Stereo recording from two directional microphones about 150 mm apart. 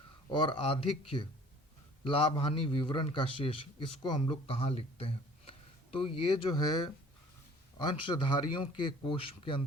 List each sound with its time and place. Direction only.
0.3 s a man's voice: 30° left (ahead or behind)